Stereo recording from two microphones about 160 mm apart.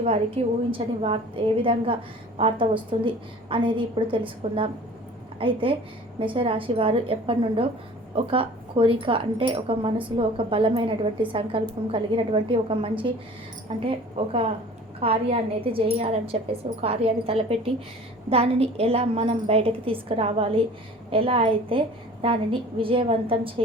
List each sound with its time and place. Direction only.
0.4 s speech: 40° right (ahead or behind)